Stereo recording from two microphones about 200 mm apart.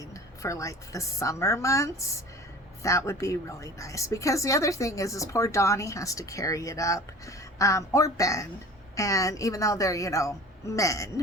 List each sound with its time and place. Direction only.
0.0 s a woman's voice: 15° left (ahead or behind)